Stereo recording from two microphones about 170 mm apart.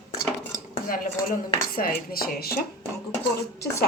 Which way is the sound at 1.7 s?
60° left (ahead or behind).